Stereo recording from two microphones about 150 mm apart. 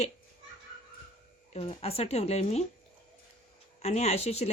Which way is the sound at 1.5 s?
40° left (ahead or behind).